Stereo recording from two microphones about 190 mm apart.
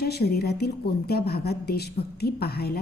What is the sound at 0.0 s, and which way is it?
A woman's voice, 55° left (ahead or behind).